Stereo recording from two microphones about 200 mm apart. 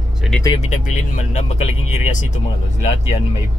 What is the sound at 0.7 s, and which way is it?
Speech, 40° left (ahead or behind).